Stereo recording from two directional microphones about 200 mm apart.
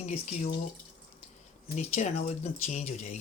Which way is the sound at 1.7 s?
35° left (ahead or behind).